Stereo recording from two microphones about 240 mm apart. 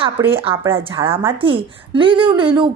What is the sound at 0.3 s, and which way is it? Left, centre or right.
A woman's voice, right.